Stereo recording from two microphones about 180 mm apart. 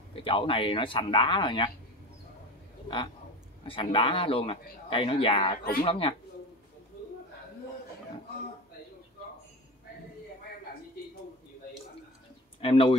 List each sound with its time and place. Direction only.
0.1 s speech: 30° left (ahead or behind)
3.6 s speech: 30° left (ahead or behind)
5.6 s speech: 55° left (ahead or behind)
5.9 s speech: 30° left (ahead or behind)
12.5 s speech: 30° left (ahead or behind)